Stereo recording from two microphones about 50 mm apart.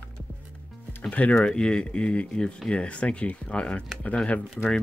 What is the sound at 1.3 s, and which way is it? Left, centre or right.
Speech, centre.